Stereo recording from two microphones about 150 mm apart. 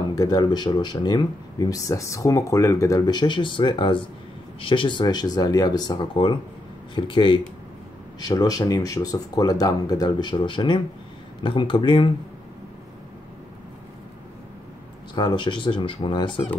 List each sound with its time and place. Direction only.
0.1 s speech: 25° left (ahead or behind)
15.1 s speech: 30° left (ahead or behind)